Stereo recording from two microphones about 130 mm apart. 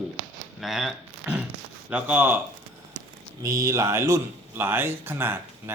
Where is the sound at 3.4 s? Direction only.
25° right (ahead or behind).